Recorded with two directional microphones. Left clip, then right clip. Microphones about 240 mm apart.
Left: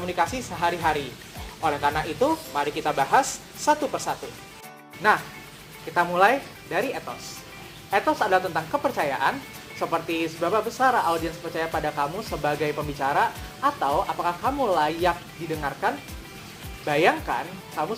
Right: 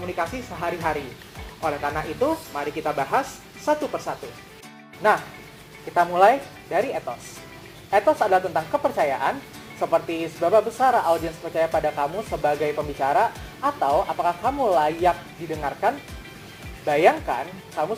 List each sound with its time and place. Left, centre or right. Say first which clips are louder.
0.2 s speech: left 4 dB; left
5.9 s speech: right 3 dB; left
7.9 s speech: right 3 dB; left
16.8 s speech: right 3 dB; left